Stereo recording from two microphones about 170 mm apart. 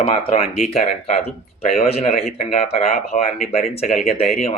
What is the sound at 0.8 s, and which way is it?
Speech, 45° left (ahead or behind).